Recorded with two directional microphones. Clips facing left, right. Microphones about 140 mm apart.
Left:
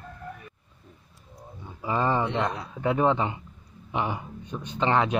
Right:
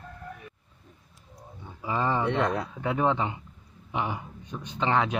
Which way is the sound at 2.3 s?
55° right (ahead or behind).